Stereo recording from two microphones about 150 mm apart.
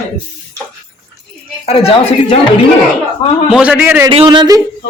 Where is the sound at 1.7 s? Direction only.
40° left (ahead or behind).